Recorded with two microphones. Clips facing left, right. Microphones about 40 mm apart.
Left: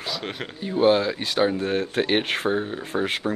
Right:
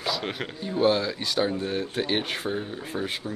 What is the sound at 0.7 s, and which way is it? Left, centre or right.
Speech, left.